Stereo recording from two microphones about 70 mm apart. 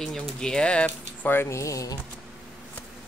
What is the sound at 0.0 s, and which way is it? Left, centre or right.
Speech, centre.